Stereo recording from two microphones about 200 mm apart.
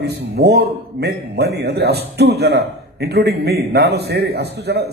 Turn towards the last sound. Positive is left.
turn(degrees=-55)  # may be behind; listen again after turning